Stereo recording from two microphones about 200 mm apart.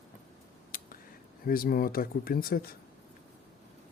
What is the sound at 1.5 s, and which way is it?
Speech, 45° left (ahead or behind).